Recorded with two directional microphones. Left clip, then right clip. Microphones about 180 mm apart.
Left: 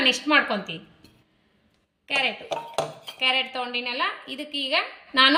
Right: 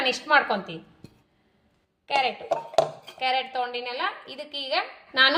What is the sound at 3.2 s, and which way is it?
A woman's voice, 55° right (ahead or behind).